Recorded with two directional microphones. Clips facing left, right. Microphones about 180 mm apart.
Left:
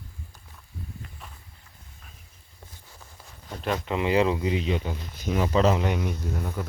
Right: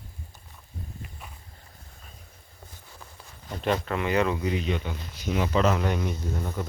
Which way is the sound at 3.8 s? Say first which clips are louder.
Left 2 dB; 20° left (ahead or behind).